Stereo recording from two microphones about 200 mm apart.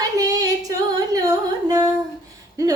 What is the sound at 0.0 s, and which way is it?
Singing, 15° right (ahead or behind).